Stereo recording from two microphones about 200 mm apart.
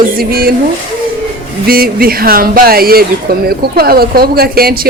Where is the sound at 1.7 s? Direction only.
50° right (ahead or behind).